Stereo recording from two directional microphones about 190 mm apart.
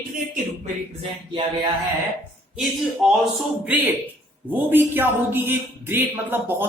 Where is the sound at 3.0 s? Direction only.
Centre (ahead or behind).